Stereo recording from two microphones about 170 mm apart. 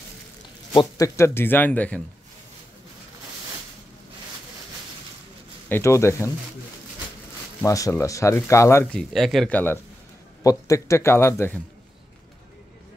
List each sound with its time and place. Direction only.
0.7 s speech: 20° left (ahead or behind)
5.7 s speech: 15° left (ahead or behind)
7.6 s speech: 20° left (ahead or behind)
8.9 s speech: centre (ahead or behind)
10.4 s speech: 20° left (ahead or behind)